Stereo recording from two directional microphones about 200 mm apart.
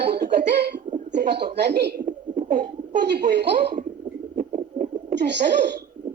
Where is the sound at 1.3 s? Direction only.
55° right (ahead or behind).